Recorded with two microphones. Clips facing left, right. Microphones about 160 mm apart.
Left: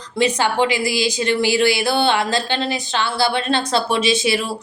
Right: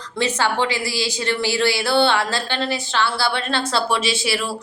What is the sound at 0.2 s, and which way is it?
A woman's voice, 15° left (ahead or behind).